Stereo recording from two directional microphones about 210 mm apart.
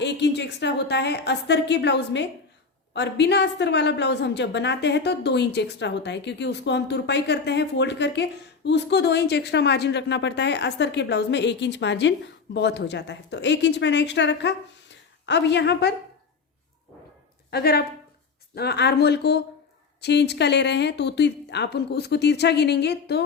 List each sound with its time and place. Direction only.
0.0 s a woman's voice: 55° left (ahead or behind)
17.5 s a woman's voice: 50° left (ahead or behind)